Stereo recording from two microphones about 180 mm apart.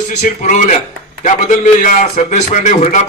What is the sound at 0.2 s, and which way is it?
A man's voice, 40° left (ahead or behind).